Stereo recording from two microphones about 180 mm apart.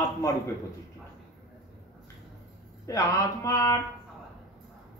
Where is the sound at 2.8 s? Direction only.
15° left (ahead or behind).